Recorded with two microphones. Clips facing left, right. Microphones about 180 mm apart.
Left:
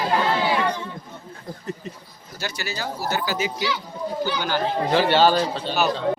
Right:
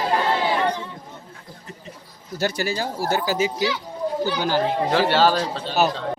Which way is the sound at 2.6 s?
45° right (ahead or behind).